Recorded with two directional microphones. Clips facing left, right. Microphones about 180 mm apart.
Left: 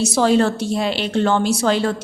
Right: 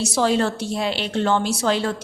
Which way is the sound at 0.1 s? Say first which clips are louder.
Left 3 dB; 50° left (ahead or behind).